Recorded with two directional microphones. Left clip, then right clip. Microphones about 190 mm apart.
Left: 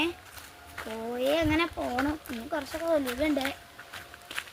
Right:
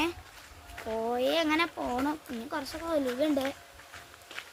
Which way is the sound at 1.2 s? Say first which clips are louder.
Left 2 dB; 10° right (ahead or behind).